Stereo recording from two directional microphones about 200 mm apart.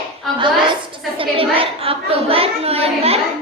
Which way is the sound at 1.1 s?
25° right (ahead or behind).